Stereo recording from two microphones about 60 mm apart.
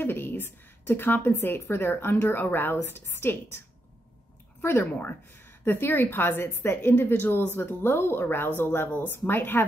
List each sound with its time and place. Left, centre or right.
0.0 s a woman's voice: left